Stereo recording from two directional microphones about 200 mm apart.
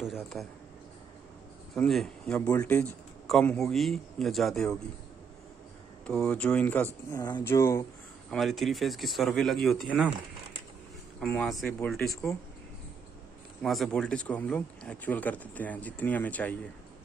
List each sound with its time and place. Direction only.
0.0 s a man's voice: centre (ahead or behind)
1.8 s a man's voice: centre (ahead or behind)
6.0 s a man's voice: 5° left (ahead or behind)
8.3 s a man's voice: centre (ahead or behind)
11.1 s a man's voice: 5° left (ahead or behind)
13.6 s a man's voice: centre (ahead or behind)